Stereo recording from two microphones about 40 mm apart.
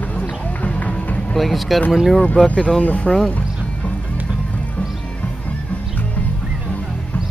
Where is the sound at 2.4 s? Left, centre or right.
Left.